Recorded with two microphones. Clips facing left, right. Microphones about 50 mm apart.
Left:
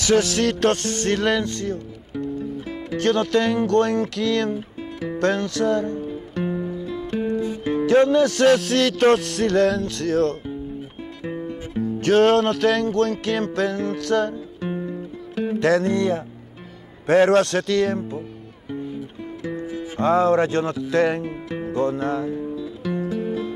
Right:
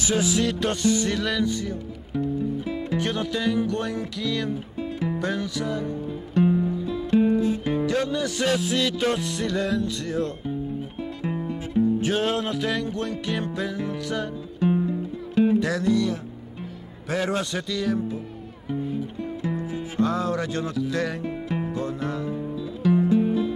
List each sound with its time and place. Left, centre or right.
0.0 s music: left
2.1 s music: centre
3.0 s music: left
5.8 s music: centre
8.1 s music: left
11.2 s music: centre
11.8 s music: left
15.3 s music: centre
15.6 s music: left
19.4 s music: centre
20.0 s speech: left
21.2 s music: centre